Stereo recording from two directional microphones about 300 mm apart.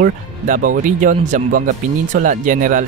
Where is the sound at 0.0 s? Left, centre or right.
Right.